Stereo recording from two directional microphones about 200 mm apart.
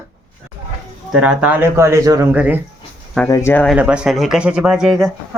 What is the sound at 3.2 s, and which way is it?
Speech, 15° left (ahead or behind).